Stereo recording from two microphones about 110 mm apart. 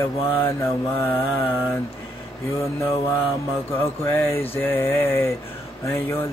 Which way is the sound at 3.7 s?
20° left (ahead or behind).